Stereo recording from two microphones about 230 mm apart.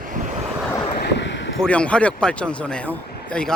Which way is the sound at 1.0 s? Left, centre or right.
Left.